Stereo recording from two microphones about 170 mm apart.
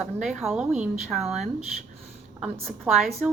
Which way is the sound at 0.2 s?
5° right (ahead or behind).